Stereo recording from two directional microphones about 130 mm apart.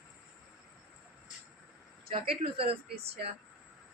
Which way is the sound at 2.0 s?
45° right (ahead or behind).